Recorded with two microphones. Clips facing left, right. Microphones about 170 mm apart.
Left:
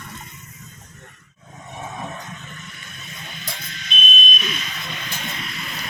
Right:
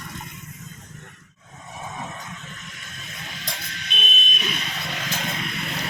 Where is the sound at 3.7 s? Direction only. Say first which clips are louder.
Left 6 dB; 65° right (ahead or behind).